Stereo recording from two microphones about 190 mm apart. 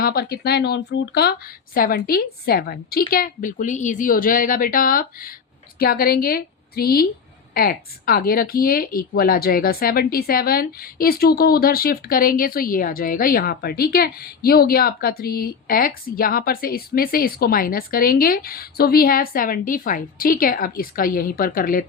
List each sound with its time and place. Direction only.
0.0 s speech: 55° left (ahead or behind)